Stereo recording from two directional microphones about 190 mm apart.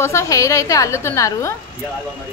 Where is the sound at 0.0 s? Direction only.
15° left (ahead or behind).